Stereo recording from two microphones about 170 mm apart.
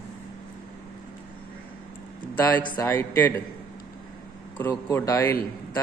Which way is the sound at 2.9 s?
10° left (ahead or behind).